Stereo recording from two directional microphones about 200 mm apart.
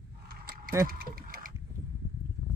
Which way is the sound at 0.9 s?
45° right (ahead or behind).